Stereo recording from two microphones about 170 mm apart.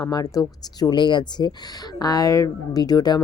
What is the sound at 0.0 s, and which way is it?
Speech, 20° left (ahead or behind).